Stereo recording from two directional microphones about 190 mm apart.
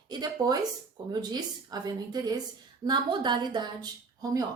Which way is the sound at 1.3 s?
20° right (ahead or behind).